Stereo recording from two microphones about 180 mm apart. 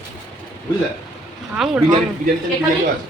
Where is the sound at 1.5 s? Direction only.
5° right (ahead or behind).